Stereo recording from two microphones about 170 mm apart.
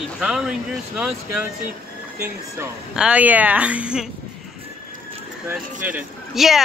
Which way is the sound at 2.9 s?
5° right (ahead or behind).